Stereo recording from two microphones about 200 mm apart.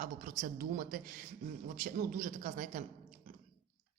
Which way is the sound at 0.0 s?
40° right (ahead or behind).